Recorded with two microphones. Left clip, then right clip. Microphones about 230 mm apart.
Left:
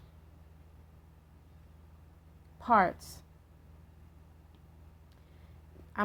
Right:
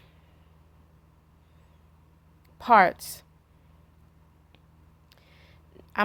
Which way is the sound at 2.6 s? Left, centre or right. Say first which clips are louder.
Right 8 dB; right.